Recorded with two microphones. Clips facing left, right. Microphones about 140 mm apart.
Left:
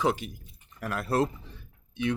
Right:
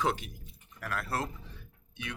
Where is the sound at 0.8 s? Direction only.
20° left (ahead or behind).